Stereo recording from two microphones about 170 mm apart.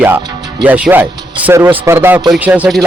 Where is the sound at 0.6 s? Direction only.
10° right (ahead or behind).